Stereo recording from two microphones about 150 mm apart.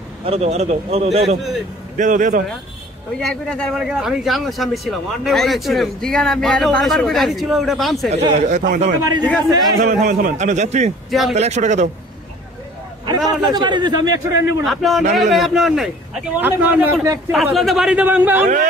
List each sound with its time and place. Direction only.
0.2 s a man's voice: 45° right (ahead or behind)
2.0 s speech: 60° right (ahead or behind)
3.2 s speech: 5° left (ahead or behind)
8.1 s a man's voice: 45° right (ahead or behind)
9.0 s a man's voice: 30° right (ahead or behind)
10.0 s a man's voice: 60° right (ahead or behind)
11.1 s speech: centre (ahead or behind)
11.3 s a man's voice: 50° right (ahead or behind)
13.5 s a man's voice: 30° right (ahead or behind)
14.7 s speech: centre (ahead or behind)
16.3 s a man's voice: 15° right (ahead or behind)
17.6 s a man's voice: centre (ahead or behind)
18.4 s speech: 55° right (ahead or behind)